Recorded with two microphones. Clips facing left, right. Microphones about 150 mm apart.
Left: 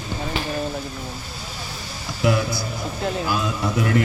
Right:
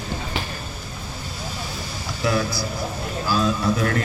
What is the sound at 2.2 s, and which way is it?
Speech, 20° left (ahead or behind).